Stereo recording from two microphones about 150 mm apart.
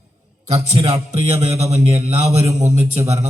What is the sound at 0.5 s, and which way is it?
A man's voice, 40° right (ahead or behind).